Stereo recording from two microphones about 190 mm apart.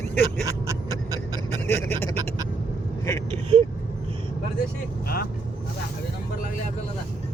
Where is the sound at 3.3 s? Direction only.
25° right (ahead or behind).